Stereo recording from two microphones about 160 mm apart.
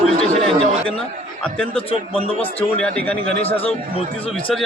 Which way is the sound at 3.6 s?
35° left (ahead or behind).